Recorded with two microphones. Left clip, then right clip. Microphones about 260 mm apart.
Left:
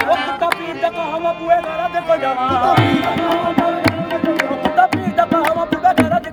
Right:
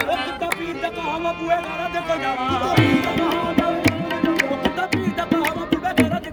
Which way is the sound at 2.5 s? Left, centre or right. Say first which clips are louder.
Left 5 dB; centre.